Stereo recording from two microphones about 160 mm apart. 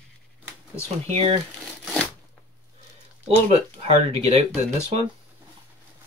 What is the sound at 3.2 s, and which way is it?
Speech, 40° right (ahead or behind).